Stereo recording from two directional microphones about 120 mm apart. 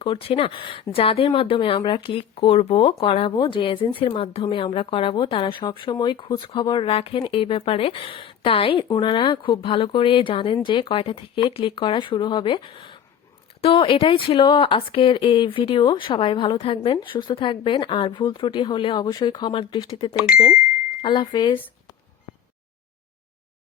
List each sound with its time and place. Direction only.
0.0 s speech: 50° left (ahead or behind)
3.3 s speech: 40° left (ahead or behind)